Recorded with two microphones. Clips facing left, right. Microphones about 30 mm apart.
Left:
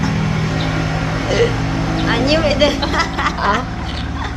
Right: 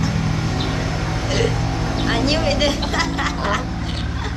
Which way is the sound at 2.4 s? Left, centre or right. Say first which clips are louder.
Left 5 dB; centre.